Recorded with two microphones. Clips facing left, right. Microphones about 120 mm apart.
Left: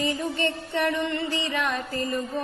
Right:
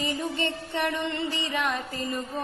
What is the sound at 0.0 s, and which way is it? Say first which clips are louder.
A woman's voice: left 3 dB; 20° right (ahead or behind).